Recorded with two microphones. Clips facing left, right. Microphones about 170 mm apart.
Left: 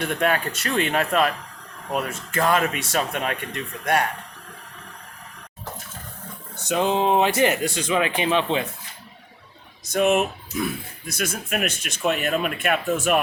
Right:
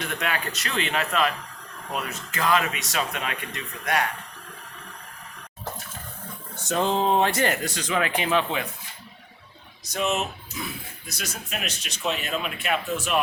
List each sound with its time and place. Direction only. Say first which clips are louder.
0.0 s speech: left 6 dB; 50° left (ahead or behind)
6.7 s speech: left 2 dB; 15° left (ahead or behind)
9.9 s speech: left 7 dB; 55° left (ahead or behind)